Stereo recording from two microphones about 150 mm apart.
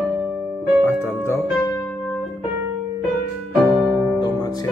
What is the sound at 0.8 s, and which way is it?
Music, 15° left (ahead or behind).